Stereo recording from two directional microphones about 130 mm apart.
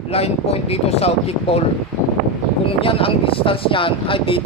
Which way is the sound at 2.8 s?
45° left (ahead or behind).